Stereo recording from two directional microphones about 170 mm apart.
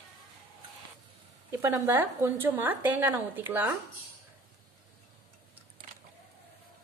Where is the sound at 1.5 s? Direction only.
15° right (ahead or behind).